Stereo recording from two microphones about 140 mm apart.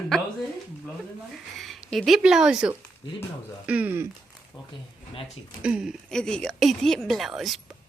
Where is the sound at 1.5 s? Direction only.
Centre (ahead or behind).